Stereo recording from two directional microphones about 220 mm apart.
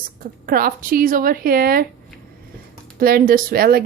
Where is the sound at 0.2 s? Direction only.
40° right (ahead or behind).